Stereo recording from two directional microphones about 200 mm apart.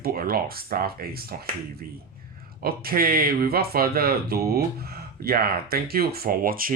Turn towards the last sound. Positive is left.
turn(degrees=-45)  # may be behind; listen again after turning